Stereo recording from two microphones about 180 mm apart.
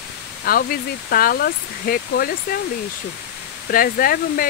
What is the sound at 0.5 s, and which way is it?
Speech, 55° left (ahead or behind).